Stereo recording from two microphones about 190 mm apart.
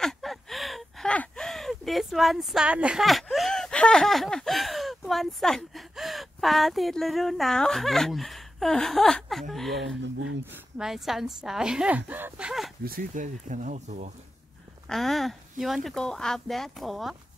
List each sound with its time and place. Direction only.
0.0 s a sound: centre (ahead or behind)
9.8 s speech: 70° right (ahead or behind)
10.4 s a woman's voice: 5° right (ahead or behind)
12.8 s speech: 45° right (ahead or behind)
14.9 s a woman's voice: centre (ahead or behind)